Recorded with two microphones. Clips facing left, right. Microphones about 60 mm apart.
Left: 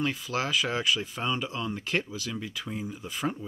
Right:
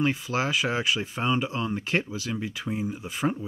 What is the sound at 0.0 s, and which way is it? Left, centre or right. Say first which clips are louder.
Speech: right 4 dB; centre.